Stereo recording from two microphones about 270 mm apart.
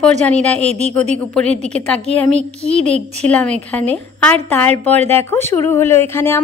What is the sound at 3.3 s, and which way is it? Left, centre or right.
A woman's voice, centre.